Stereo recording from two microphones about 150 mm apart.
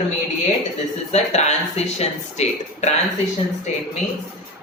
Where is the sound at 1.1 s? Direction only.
45° left (ahead or behind).